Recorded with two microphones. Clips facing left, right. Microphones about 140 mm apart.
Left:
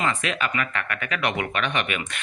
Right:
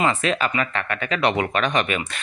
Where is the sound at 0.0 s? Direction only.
35° right (ahead or behind).